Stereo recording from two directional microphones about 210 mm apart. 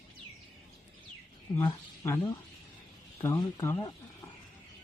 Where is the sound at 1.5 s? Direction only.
15° left (ahead or behind).